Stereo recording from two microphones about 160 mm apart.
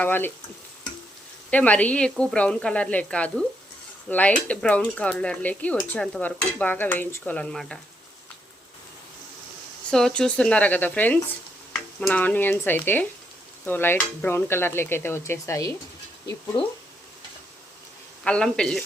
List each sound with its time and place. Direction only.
0.0 s speech: 10° left (ahead or behind)
1.5 s speech: 10° left (ahead or behind)
9.9 s stir: 5° left (ahead or behind)
12.0 s speech: 10° left (ahead or behind); by 16.7 s 25° left (ahead or behind)
18.2 s speech: 5° left (ahead or behind)